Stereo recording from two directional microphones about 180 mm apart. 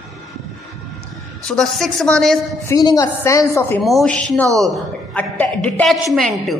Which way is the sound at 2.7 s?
20° left (ahead or behind).